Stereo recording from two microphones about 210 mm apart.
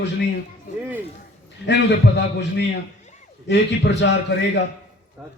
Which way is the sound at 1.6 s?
55° left (ahead or behind).